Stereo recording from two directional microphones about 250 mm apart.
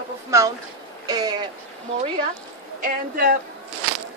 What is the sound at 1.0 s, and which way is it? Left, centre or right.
Speech, centre.